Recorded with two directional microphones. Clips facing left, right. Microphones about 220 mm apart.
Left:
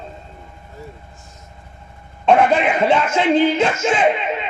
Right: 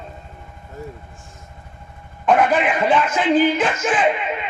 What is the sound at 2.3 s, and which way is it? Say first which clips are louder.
A man's voice: left 2 dB; 25° left (ahead or behind).